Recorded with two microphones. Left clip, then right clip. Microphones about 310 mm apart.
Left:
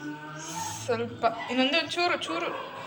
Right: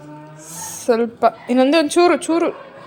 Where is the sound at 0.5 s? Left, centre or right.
Centre.